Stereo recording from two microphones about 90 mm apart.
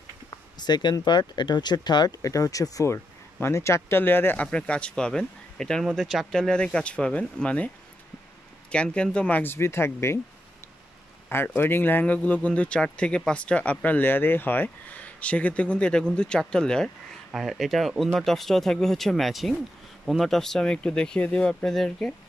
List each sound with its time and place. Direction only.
0.6 s speech: 55° left (ahead or behind)
2.2 s speech: 40° left (ahead or behind)
4.5 s speech: 10° left (ahead or behind)
8.7 s speech: 10° left (ahead or behind); by 10.2 s 30° left (ahead or behind)
11.2 s speech: 25° left (ahead or behind); by 22.1 s 5° left (ahead or behind)